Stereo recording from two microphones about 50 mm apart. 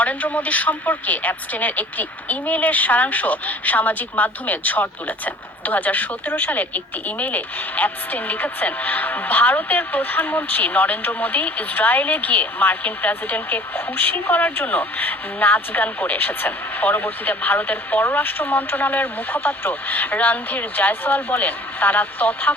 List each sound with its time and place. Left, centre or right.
0.0 s speech: left